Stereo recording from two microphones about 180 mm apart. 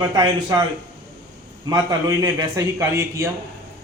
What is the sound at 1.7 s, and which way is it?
A man's voice, 20° right (ahead or behind).